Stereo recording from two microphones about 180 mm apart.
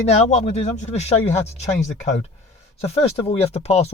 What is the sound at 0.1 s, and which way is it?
Speech, 35° left (ahead or behind).